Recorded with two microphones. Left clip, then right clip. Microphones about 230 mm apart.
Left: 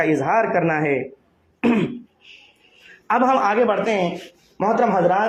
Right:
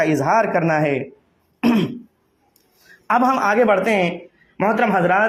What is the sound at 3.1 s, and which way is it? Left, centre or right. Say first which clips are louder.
A man's voice: right 1 dB; right.